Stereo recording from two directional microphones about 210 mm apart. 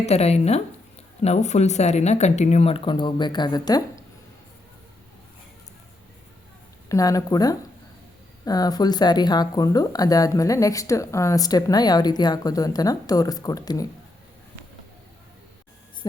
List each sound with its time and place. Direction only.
0.0 s speech: 30° left (ahead or behind)
6.8 s speech: 15° left (ahead or behind)